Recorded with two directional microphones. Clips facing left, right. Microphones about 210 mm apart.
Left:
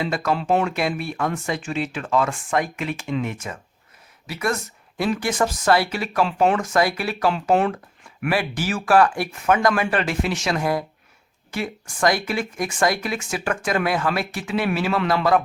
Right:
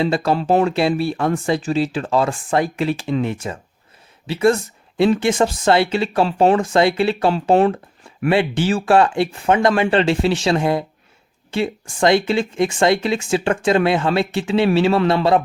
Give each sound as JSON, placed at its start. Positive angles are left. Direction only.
{"t": 0.0, "sound": "speech", "side_deg": -30}